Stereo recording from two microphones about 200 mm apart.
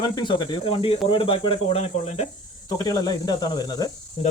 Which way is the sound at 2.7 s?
20° left (ahead or behind).